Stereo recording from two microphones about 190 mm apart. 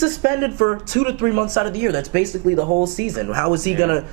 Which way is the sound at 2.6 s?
35° right (ahead or behind).